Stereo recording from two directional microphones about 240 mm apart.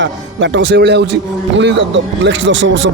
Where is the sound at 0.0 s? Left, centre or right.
Right.